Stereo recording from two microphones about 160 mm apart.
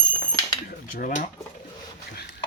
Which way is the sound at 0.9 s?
55° left (ahead or behind).